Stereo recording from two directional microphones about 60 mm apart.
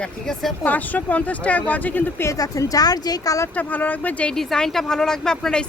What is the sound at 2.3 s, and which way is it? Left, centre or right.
Speech, left.